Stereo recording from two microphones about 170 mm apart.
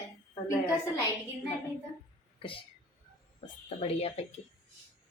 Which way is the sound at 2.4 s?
30° left (ahead or behind).